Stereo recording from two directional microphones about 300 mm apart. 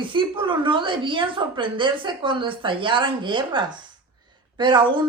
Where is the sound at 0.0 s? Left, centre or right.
Centre.